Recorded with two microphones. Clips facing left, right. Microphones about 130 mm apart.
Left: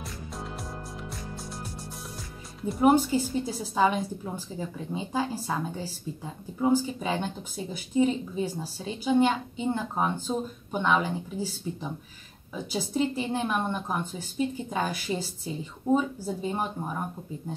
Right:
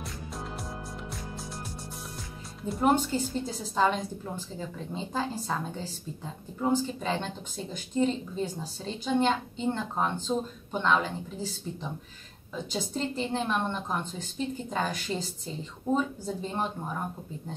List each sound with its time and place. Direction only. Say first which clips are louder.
0.0 s music: even; centre (ahead or behind)
2.6 s speech: left 4 dB; 10° left (ahead or behind)